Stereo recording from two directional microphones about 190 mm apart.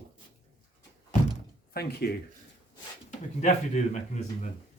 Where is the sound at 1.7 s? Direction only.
55° left (ahead or behind).